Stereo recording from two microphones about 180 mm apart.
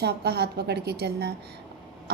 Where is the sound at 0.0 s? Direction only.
65° right (ahead or behind).